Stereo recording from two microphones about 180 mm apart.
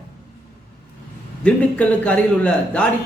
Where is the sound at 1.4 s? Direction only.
5° left (ahead or behind).